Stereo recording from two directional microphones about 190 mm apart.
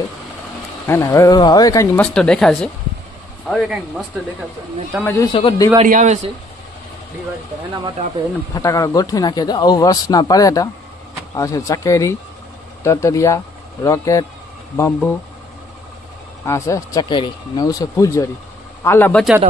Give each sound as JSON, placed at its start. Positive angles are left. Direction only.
{"t": 0.8, "sound": "speech", "side_deg": 15}
{"t": 2.0, "sound": "speech", "side_deg": 5}
{"t": 5.0, "sound": "speech", "side_deg": 15}
{"t": 5.8, "sound": "a man's voice", "side_deg": -40}
{"t": 8.5, "sound": "speech", "side_deg": 20}
{"t": 16.4, "sound": "speech", "side_deg": 15}